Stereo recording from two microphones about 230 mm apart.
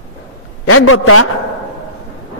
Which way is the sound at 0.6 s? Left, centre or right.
Left.